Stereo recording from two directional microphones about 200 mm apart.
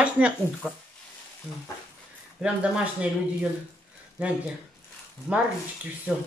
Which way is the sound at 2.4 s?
5° right (ahead or behind).